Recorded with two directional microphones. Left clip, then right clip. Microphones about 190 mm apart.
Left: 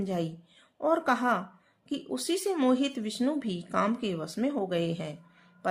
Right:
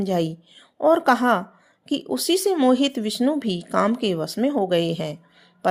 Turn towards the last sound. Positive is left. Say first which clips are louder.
# right 10 dB
turn(degrees=-30)  # may be behind; listen again after turning